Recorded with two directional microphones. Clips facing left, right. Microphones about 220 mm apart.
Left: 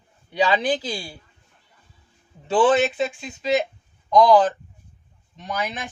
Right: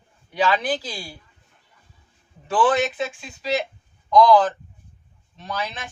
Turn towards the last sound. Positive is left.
turn(degrees=15)  # may be behind; listen again after turning